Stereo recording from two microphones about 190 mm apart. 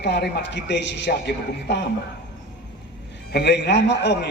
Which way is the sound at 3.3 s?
60° left (ahead or behind).